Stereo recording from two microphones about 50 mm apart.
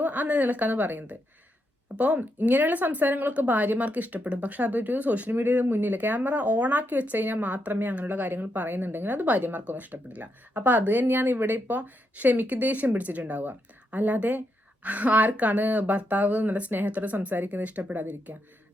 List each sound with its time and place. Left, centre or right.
0.0 s a woman's voice: right
18.3 s speech: right